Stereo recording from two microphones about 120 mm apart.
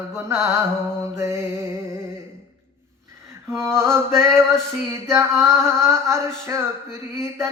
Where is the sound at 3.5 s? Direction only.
20° right (ahead or behind).